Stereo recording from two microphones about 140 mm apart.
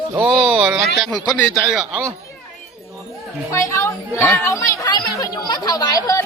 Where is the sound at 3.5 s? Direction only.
20° left (ahead or behind).